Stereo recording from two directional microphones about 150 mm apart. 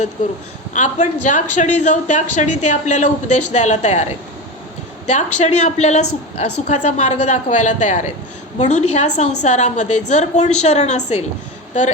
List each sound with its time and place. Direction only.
0.8 s speech: 55° left (ahead or behind)